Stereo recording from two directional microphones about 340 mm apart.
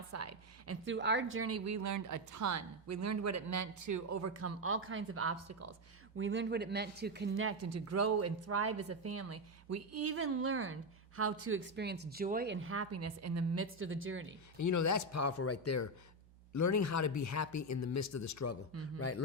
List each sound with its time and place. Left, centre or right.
0.1 s a woman's voice: right
0.9 s a woman's voice: right
6.1 s speech: right
14.6 s speech: left
18.9 s a man's voice: left